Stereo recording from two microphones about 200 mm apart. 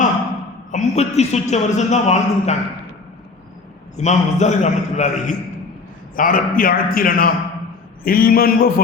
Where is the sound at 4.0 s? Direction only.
35° left (ahead or behind).